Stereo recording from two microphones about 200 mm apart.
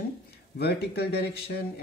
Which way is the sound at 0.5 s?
55° left (ahead or behind).